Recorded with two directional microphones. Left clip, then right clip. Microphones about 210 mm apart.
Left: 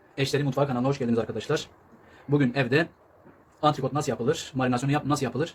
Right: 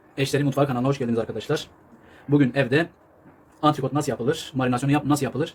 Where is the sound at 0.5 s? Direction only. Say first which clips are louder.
Right 3 dB; 25° right (ahead or behind).